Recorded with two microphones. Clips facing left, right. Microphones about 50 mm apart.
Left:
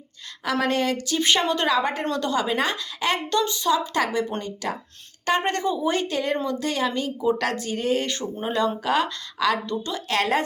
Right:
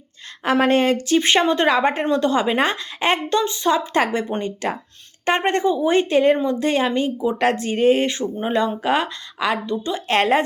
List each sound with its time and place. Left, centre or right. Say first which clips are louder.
0.4 s a woman's voice: right 6 dB; right
10.1 s a woman's voice: right 5 dB; right